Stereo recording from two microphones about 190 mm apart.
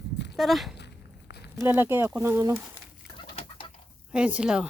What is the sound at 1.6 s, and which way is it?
Speech, 10° right (ahead or behind).